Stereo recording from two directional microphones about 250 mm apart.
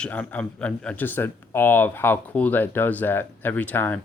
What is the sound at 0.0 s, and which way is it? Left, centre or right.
Speech, centre.